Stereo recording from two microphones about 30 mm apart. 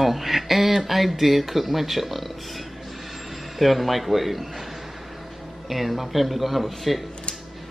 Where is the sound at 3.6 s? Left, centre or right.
Centre.